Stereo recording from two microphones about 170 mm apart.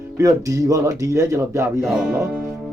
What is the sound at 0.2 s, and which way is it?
Speech, 20° right (ahead or behind).